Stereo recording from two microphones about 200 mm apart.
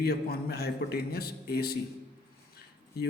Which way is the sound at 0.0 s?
50° left (ahead or behind).